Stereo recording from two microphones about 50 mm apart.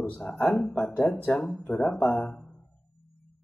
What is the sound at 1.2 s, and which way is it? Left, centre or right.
Speech, left.